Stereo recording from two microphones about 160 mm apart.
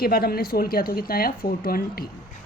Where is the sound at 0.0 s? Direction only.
70° left (ahead or behind).